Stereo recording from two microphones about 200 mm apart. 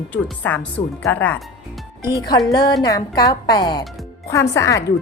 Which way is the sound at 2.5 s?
20° left (ahead or behind).